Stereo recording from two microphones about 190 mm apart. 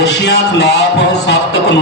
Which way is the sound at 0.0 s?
60° left (ahead or behind).